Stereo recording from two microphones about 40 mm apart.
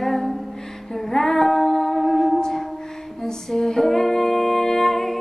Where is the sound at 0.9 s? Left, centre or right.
Centre.